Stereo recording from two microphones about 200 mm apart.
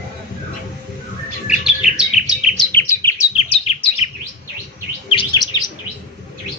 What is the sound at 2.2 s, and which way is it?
Bird, 5° right (ahead or behind).